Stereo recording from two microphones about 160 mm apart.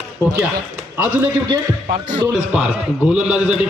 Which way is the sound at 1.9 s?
50° right (ahead or behind).